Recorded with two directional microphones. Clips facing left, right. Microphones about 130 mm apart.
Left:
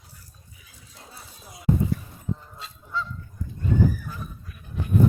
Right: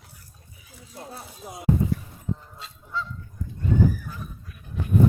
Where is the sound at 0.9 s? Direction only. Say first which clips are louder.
Right 8 dB; 55° right (ahead or behind).